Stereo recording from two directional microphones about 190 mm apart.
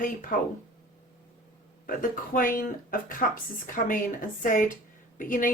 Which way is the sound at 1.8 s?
45° left (ahead or behind).